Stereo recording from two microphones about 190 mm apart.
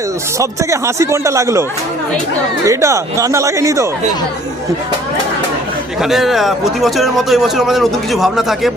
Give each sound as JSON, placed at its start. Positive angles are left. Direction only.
{"t": 0.3, "sound": "speech", "side_deg": -15}
{"t": 2.6, "sound": "speech", "side_deg": -15}
{"t": 6.0, "sound": "a man's voice", "side_deg": 0}